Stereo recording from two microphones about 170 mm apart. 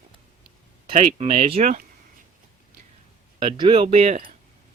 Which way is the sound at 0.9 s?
35° right (ahead or behind).